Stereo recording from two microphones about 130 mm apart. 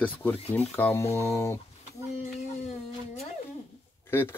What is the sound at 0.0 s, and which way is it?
Speech, 15° left (ahead or behind).